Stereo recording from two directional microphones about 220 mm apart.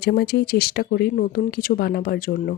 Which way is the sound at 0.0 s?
45° left (ahead or behind).